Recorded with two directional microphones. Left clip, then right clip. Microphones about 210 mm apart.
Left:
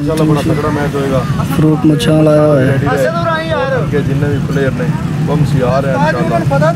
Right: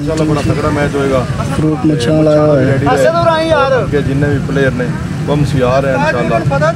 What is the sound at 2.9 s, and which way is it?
Speech, 30° right (ahead or behind).